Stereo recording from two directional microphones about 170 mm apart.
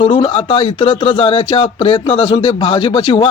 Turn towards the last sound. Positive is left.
turn(degrees=30)  # may be behind; listen again after turning